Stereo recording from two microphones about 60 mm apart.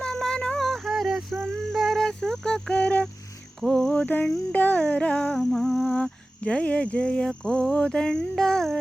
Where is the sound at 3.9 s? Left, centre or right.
Left.